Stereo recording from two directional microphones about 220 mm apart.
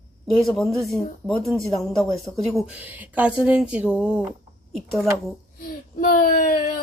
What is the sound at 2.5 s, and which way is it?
Speech, 5° right (ahead or behind).